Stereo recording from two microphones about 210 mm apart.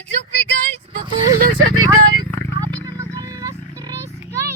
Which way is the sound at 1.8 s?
20° right (ahead or behind).